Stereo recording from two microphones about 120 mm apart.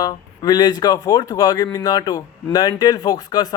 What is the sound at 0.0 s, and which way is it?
Speech, 35° left (ahead or behind).